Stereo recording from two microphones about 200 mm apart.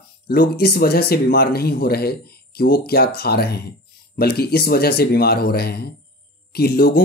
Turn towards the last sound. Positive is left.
turn(degrees=50)  # may be behind; listen again after turning